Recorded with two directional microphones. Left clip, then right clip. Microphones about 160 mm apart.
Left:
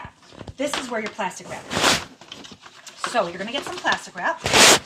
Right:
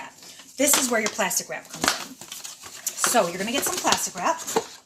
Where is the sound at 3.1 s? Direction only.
10° right (ahead or behind).